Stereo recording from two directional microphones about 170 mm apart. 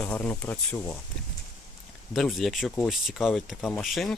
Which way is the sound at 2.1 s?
Centre (ahead or behind).